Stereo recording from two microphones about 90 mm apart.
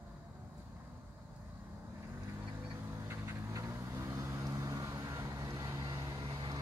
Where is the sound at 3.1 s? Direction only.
35° right (ahead or behind).